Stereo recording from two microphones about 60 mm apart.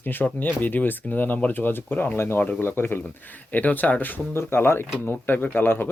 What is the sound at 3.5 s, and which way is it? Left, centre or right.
Speech, left.